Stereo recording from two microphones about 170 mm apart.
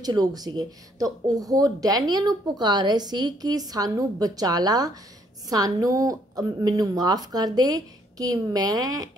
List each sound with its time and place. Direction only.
0.0 s speech: 25° right (ahead or behind)